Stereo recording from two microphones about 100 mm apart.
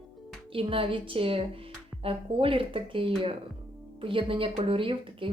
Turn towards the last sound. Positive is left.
turn(degrees=-60)  # may be behind; listen again after turning